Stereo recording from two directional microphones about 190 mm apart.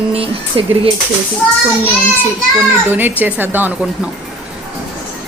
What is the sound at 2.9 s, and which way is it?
Speech, 10° right (ahead or behind).